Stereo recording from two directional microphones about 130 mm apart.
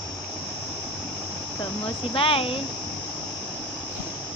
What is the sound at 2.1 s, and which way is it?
Speech, 45° left (ahead or behind).